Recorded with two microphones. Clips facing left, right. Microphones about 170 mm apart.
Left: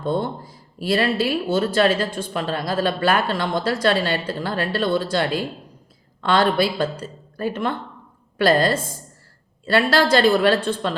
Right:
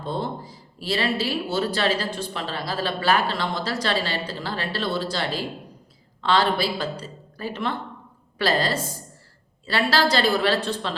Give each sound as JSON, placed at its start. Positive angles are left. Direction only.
{"t": 0.0, "sound": "speech", "side_deg": 50}